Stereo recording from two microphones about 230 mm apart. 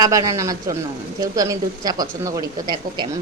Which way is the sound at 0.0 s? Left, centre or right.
Centre.